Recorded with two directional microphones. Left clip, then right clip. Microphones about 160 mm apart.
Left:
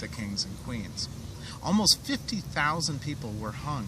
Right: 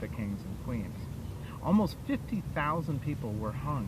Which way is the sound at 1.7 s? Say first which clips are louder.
Left 6 dB; 20° left (ahead or behind).